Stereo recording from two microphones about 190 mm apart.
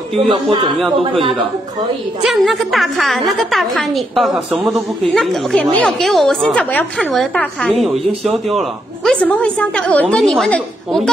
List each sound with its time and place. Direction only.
0.1 s speech: 30° right (ahead or behind)
2.2 s a woman's voice: centre (ahead or behind)